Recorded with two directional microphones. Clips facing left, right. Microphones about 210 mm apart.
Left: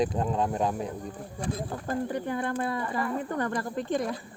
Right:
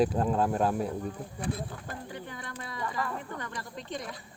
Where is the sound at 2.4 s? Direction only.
55° left (ahead or behind).